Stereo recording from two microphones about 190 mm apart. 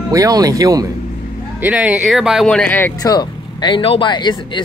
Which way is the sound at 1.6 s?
5° right (ahead or behind).